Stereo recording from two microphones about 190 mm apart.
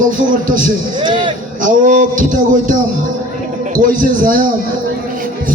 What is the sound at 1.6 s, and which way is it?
Speech, 45° right (ahead or behind).